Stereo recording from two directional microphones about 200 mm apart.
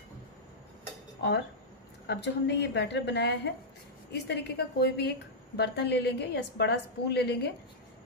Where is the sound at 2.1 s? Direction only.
60° left (ahead or behind).